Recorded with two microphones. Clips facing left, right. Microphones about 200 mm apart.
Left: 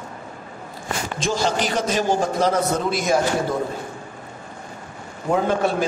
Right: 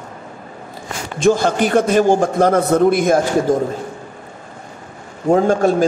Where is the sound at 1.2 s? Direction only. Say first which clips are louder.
Right 9 dB; 55° right (ahead or behind).